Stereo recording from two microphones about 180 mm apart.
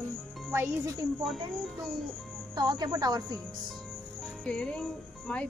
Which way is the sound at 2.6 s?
25° right (ahead or behind).